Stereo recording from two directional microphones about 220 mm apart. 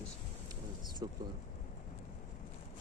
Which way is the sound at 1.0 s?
20° right (ahead or behind).